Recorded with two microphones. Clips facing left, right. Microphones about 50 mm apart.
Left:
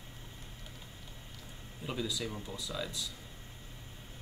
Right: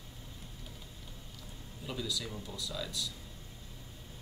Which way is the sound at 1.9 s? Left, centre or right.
Left.